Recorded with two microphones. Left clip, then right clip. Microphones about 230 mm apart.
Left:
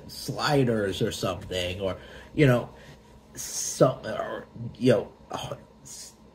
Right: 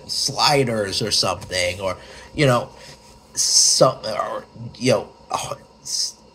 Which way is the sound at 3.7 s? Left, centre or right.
Right.